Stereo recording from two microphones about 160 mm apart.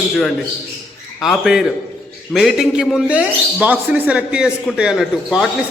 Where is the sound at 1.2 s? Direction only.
Centre (ahead or behind).